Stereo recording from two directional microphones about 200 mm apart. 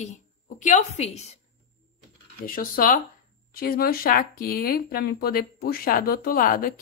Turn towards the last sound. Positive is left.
turn(degrees=45)  # may be behind; listen again after turning